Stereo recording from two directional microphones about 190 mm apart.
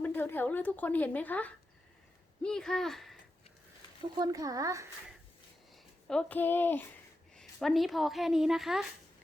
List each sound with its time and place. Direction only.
0.0 s a woman's voice: 10° left (ahead or behind)
4.2 s speech: 20° right (ahead or behind)
5.7 s a woman's voice: 5° left (ahead or behind)